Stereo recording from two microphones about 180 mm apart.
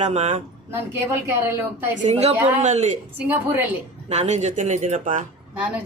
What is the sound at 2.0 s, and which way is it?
Speech, 30° right (ahead or behind).